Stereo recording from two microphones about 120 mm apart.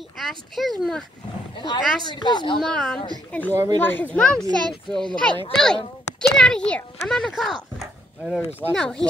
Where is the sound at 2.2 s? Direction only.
40° left (ahead or behind).